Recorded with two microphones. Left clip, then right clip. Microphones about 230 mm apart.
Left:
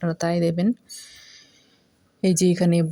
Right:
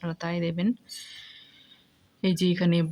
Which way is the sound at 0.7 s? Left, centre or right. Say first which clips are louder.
Left 4 dB; centre.